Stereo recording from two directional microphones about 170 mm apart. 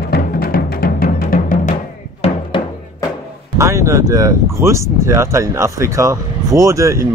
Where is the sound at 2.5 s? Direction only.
30° left (ahead or behind).